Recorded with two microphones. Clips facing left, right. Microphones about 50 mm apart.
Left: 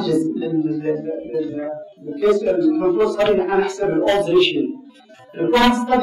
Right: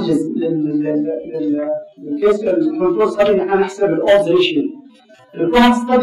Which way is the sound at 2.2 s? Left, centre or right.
Centre.